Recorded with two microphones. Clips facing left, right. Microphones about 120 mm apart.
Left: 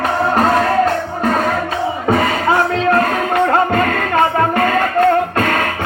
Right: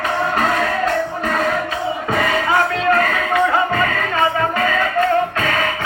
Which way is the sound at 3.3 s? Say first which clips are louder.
Left 3 dB; 55° left (ahead or behind).